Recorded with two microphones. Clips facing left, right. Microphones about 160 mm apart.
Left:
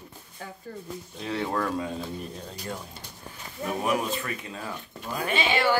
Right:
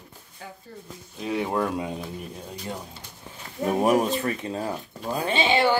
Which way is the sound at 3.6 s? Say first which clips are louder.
Right 6 dB; 40° right (ahead or behind).